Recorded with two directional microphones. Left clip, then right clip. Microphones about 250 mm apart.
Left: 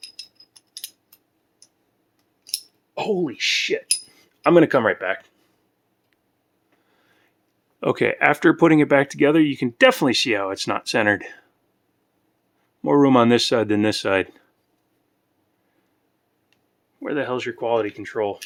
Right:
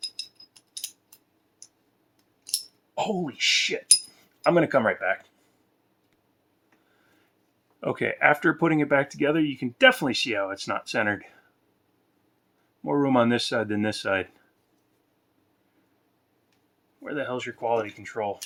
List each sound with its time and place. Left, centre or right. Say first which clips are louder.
0.2 s a sound: right 2 dB; centre
2.9 s speech: left 5 dB; left
7.8 s speech: left 5 dB; left
12.8 s speech: left 7 dB; left
17.0 s speech: left 6 dB; left